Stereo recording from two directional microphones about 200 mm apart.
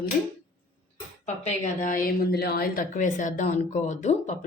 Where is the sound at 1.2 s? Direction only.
40° left (ahead or behind).